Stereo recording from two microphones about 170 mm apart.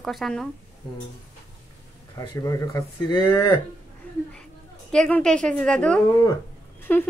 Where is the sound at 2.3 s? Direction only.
20° left (ahead or behind).